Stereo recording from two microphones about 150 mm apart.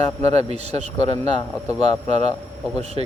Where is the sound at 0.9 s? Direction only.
25° left (ahead or behind).